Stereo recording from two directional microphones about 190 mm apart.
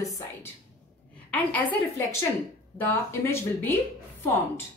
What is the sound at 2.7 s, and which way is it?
A woman's voice, 15° left (ahead or behind).